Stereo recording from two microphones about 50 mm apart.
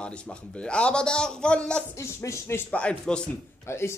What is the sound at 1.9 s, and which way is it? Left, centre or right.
Speech, left.